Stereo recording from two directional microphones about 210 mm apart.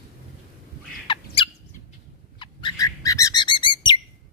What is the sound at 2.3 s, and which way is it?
Bird flight, 20° left (ahead or behind).